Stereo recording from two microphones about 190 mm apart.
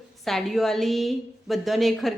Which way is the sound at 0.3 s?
Centre (ahead or behind).